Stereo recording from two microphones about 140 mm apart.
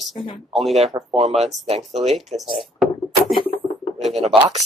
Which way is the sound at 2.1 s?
Centre (ahead or behind).